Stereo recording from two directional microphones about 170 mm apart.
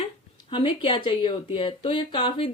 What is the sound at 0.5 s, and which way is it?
Speech, 30° left (ahead or behind).